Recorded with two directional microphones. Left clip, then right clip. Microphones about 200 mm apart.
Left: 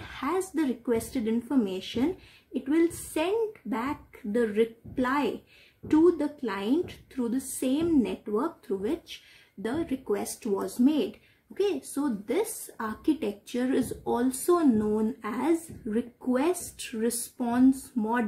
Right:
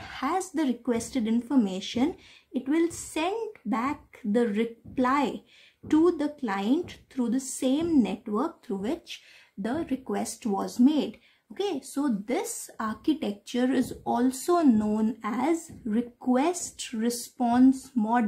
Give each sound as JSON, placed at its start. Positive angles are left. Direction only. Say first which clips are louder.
{"t": 0.0, "sound": "a woman's voice", "louder": "right 1 dB", "side_deg": -40}
{"t": 3.7, "sound": "a woman's voice", "louder": "right 3 dB", "side_deg": -40}